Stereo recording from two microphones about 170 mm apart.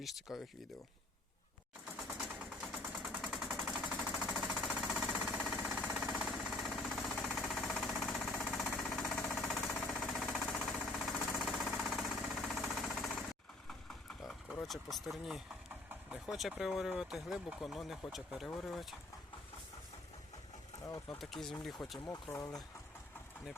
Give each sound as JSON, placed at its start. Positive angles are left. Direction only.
{"t": 0.0, "sound": "speech", "side_deg": 0}
{"t": 3.0, "sound": "a sound", "side_deg": 0}
{"t": 4.1, "sound": "jackhammer", "side_deg": 0}
{"t": 13.7, "sound": "speech", "side_deg": 0}
{"t": 20.8, "sound": "speech", "side_deg": 20}
{"t": 21.2, "sound": "speech", "side_deg": 0}
{"t": 22.0, "sound": "speech", "side_deg": 20}